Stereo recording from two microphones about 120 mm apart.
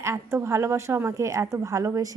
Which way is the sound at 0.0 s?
20° right (ahead or behind).